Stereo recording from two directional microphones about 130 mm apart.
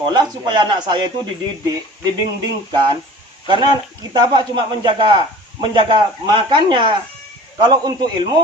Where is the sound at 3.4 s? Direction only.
35° right (ahead or behind).